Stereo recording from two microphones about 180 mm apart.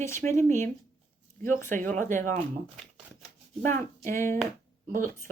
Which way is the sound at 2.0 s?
45° right (ahead or behind).